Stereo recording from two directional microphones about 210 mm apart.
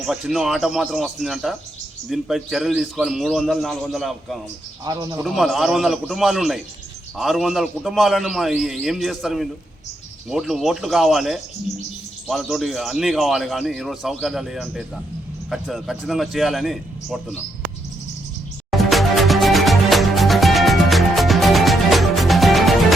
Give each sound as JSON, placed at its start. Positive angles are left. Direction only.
{"t": 0.0, "sound": "speech", "side_deg": 0}
{"t": 4.9, "sound": "speech", "side_deg": -20}
{"t": 5.2, "sound": "speech", "side_deg": 0}
{"t": 18.7, "sound": "music", "side_deg": 0}